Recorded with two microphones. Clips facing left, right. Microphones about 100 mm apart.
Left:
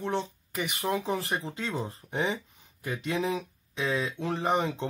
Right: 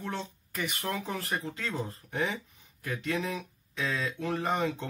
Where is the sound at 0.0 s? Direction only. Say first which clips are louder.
Left 6 dB; 25° left (ahead or behind).